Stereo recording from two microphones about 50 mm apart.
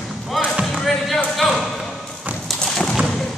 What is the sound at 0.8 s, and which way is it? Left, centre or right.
Basketball bounce, centre.